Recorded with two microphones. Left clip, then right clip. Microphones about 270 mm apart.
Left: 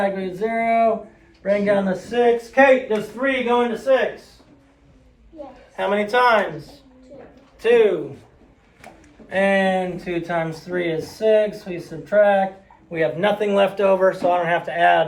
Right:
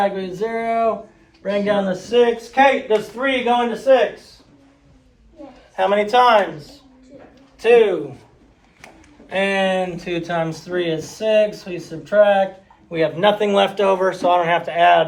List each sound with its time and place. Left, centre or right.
0.0 s a man's voice: centre
2.6 s speech: right
5.7 s speech: right
7.6 s speech: right
9.3 s a man's voice: centre